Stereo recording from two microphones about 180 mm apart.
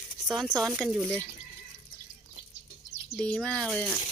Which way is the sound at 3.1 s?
5° left (ahead or behind).